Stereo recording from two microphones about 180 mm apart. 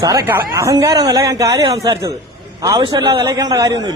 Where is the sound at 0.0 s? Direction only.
20° right (ahead or behind).